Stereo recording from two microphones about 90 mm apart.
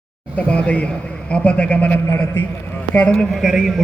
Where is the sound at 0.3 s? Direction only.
15° left (ahead or behind).